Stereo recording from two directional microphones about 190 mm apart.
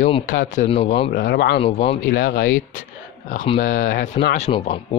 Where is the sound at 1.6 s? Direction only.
30° left (ahead or behind).